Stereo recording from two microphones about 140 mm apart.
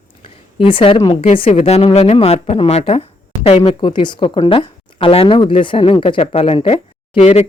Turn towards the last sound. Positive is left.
turn(degrees=50)  # may be behind; listen again after turning